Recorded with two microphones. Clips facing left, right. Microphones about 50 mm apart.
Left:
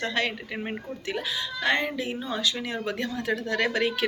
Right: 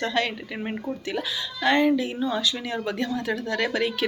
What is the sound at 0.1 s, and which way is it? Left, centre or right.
Speech, left.